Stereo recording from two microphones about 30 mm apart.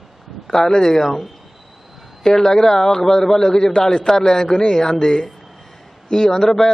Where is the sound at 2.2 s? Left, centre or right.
Centre.